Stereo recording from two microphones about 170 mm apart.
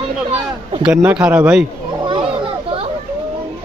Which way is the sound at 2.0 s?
30° right (ahead or behind).